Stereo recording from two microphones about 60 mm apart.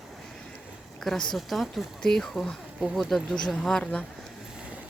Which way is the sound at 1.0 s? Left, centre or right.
Centre.